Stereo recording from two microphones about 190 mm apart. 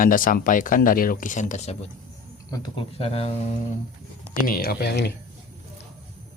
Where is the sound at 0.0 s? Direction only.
45° left (ahead or behind).